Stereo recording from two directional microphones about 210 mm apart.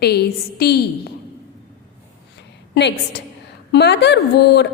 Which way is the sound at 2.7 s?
55° left (ahead or behind).